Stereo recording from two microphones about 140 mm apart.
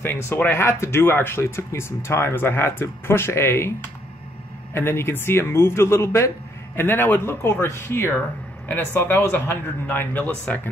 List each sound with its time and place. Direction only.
0.0 s speech: 15° left (ahead or behind)
4.7 s speech: 15° left (ahead or behind)